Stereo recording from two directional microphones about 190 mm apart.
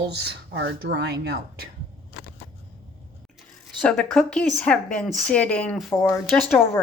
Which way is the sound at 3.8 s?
5° left (ahead or behind).